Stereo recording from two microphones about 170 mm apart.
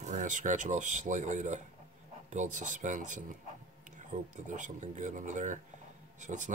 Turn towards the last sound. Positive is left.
turn(degrees=-45)  # may be behind; listen again after turning